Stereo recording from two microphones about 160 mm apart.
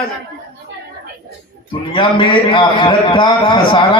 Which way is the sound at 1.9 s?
30° left (ahead or behind).